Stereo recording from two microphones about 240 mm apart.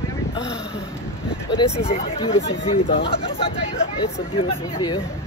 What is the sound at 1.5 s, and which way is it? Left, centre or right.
Speech, left.